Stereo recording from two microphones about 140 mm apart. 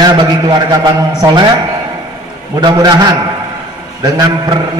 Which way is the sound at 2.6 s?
30° right (ahead or behind).